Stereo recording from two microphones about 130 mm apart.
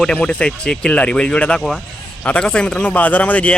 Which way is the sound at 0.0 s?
5° left (ahead or behind).